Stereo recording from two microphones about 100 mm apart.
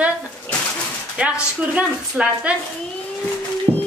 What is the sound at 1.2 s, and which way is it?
A woman's voice, 10° right (ahead or behind).